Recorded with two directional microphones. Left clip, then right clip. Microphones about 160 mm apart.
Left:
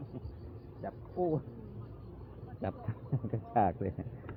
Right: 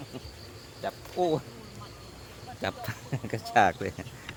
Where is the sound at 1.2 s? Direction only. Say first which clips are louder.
Right 6 dB; 70° right (ahead or behind).